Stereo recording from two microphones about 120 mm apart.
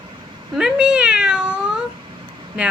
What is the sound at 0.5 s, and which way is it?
Cat, 5° right (ahead or behind).